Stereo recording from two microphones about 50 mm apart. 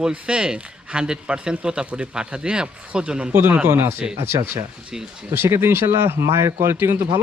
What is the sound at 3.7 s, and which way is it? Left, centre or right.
Speech, right.